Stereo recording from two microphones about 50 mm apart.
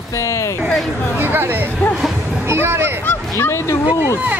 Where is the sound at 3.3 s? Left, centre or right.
Left.